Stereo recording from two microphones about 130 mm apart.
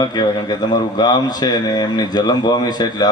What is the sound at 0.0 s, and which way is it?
A man's voice, 35° left (ahead or behind).